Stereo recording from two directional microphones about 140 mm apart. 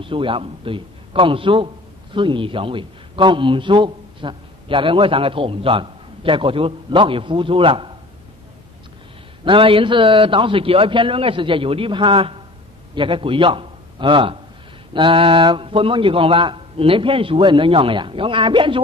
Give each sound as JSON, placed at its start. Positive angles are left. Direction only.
{"t": 0.0, "sound": "a man's voice", "side_deg": -40}
{"t": 9.4, "sound": "a man's voice", "side_deg": -35}